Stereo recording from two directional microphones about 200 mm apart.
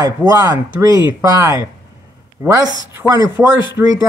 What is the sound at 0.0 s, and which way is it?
Speech, 20° right (ahead or behind).